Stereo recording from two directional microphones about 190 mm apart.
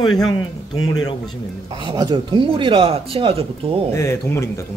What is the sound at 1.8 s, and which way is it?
Speech, 20° right (ahead or behind).